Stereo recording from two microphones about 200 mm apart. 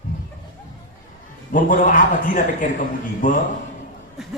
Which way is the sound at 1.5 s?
40° left (ahead or behind).